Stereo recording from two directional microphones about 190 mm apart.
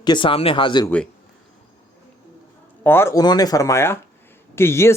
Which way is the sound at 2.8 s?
10° left (ahead or behind).